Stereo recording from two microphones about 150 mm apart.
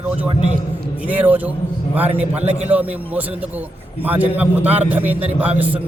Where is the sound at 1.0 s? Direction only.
10° right (ahead or behind).